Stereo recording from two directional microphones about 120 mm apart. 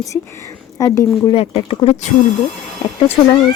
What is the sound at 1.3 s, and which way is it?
Speech, 50° left (ahead or behind).